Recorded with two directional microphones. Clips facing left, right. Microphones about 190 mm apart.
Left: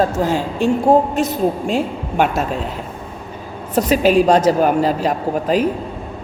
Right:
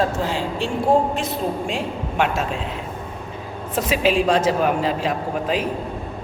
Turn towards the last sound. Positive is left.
turn(degrees=45)  # may be behind; listen again after turning